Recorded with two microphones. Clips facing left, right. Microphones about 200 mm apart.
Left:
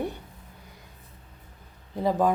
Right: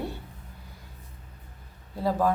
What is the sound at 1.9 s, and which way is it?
Speech, 20° left (ahead or behind).